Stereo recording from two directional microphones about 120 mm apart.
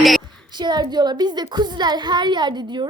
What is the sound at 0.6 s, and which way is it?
A woman's voice, 35° right (ahead or behind).